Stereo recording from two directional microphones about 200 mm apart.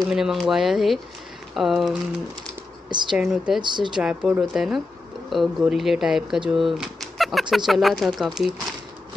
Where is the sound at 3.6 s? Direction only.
25° right (ahead or behind).